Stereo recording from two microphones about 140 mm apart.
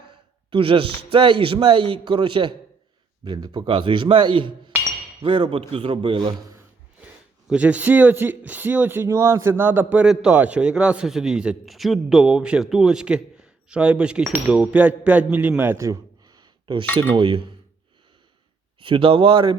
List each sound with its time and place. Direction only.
0.5 s a man's voice: 40° right (ahead or behind)
7.4 s speech: 10° right (ahead or behind); by 16.8 s 35° right (ahead or behind)
16.8 s speech: 15° left (ahead or behind)
17.2 s a man's voice: 35° right (ahead or behind)
18.8 s a man's voice: 40° right (ahead or behind)